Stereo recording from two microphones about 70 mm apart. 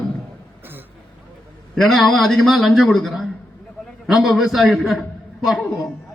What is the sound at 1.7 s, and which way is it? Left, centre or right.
A man's voice, centre.